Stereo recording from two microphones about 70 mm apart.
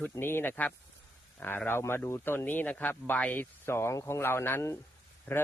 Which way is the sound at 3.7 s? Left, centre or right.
Left.